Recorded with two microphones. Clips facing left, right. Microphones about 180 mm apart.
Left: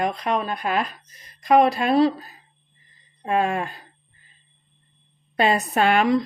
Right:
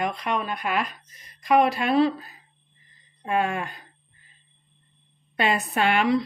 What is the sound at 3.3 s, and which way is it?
Speech, 35° left (ahead or behind).